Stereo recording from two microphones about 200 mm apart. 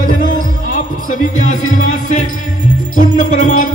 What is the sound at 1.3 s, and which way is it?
Music, 40° left (ahead or behind).